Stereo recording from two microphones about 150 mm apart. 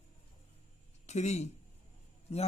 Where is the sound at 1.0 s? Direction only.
50° left (ahead or behind).